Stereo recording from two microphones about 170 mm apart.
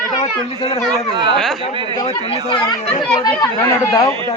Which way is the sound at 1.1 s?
30° right (ahead or behind).